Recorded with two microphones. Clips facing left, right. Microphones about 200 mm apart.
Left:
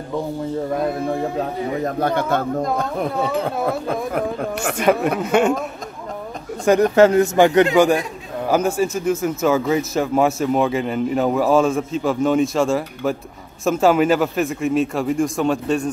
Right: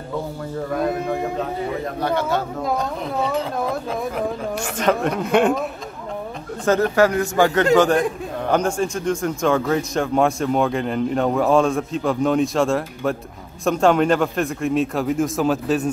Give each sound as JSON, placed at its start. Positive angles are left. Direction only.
{"t": 2.0, "sound": "speech", "side_deg": 50}
{"t": 4.1, "sound": "speech", "side_deg": 55}
{"t": 4.7, "sound": "speech", "side_deg": 10}
{"t": 6.6, "sound": "a man's voice", "side_deg": 15}